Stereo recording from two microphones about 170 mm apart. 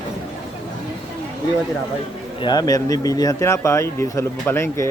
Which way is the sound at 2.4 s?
25° left (ahead or behind).